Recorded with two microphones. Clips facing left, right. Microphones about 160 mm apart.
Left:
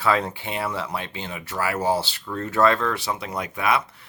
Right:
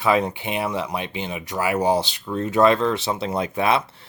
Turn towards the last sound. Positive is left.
turn(degrees=-30)  # may be behind; listen again after turning